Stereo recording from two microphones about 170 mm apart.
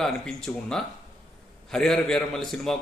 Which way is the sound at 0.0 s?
Centre (ahead or behind).